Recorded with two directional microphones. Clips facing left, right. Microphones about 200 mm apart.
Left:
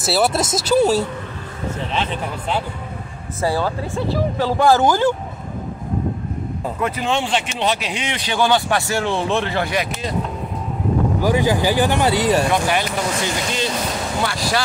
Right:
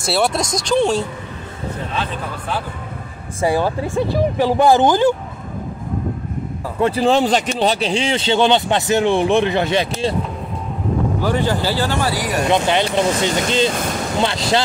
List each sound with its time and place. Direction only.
0.0 s speech: 5° left (ahead or behind)
2.0 s speech: 25° left (ahead or behind)
3.3 s speech: 15° right (ahead or behind)
6.8 s speech: 30° right (ahead or behind)
11.2 s speech: 10° left (ahead or behind)
12.4 s speech: 25° right (ahead or behind)